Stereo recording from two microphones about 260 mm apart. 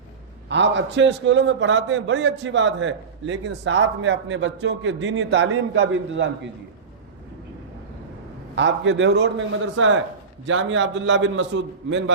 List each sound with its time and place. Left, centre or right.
0.4 s a man's voice: right
8.5 s a man's voice: right